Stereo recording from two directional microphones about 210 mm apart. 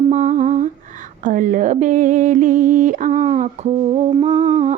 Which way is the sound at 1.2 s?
35° right (ahead or behind).